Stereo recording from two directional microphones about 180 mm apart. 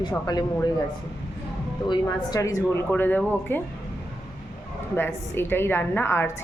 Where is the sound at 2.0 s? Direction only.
20° left (ahead or behind).